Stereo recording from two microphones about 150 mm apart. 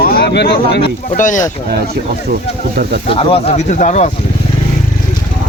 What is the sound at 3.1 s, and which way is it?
Speech, 40° left (ahead or behind).